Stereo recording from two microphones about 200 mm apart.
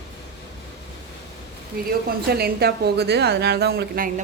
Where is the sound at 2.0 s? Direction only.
50° right (ahead or behind).